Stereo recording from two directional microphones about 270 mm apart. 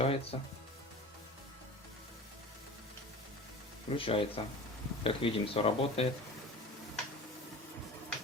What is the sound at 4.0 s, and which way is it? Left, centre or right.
Speech, centre.